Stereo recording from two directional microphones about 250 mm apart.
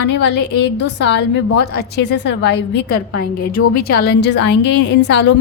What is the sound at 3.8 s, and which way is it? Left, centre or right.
A woman's voice, left.